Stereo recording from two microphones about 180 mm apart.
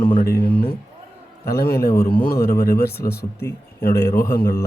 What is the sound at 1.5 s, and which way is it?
Speech, 60° left (ahead or behind).